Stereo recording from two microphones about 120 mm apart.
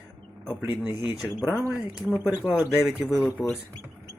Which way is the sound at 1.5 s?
20° left (ahead or behind).